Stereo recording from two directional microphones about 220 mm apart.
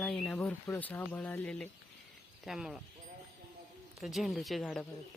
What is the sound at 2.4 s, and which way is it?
Speech, centre (ahead or behind).